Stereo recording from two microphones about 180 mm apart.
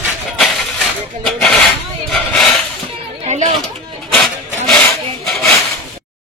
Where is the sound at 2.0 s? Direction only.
Centre (ahead or behind).